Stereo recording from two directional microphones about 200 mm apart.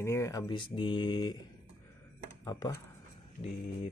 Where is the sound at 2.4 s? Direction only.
15° left (ahead or behind).